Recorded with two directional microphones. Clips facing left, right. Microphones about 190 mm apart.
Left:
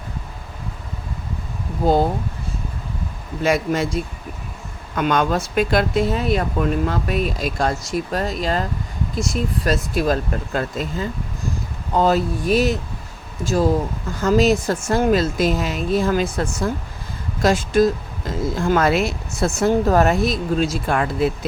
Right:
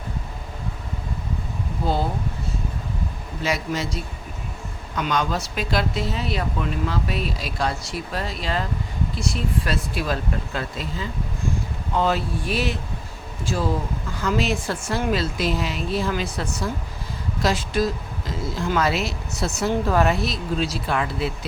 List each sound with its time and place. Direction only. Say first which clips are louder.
1.8 s speech: left 8 dB; 45° left (ahead or behind)
3.4 s speech: left 6 dB; 50° left (ahead or behind)